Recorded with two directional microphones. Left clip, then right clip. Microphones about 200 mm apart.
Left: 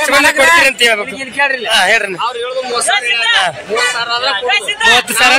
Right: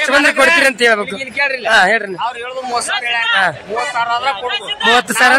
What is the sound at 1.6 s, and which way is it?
Speech, 30° right (ahead or behind).